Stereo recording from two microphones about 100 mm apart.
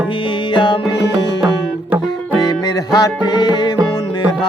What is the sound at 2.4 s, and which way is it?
Music, 40° left (ahead or behind).